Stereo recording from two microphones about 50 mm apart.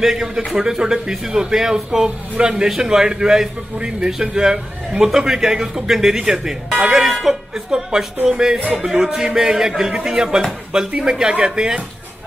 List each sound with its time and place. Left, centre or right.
0.0 s a man's voice: centre